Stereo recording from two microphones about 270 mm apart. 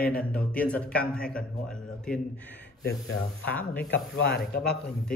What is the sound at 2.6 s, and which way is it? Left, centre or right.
Speech, left.